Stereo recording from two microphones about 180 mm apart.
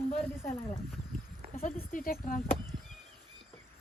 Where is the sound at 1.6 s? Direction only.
50° left (ahead or behind).